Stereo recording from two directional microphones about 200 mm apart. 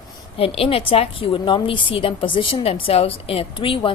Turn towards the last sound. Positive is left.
turn(degrees=25)  # may be behind; listen again after turning